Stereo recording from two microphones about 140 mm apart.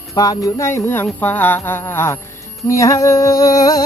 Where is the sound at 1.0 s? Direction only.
10° left (ahead or behind).